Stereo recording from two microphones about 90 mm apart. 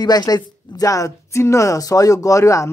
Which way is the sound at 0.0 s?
50° left (ahead or behind).